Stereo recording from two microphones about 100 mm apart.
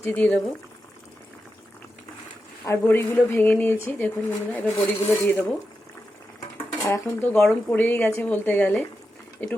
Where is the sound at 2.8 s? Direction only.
20° left (ahead or behind).